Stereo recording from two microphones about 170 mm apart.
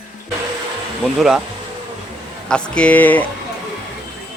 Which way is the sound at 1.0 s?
Centre (ahead or behind).